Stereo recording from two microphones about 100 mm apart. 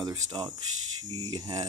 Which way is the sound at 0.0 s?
40° right (ahead or behind).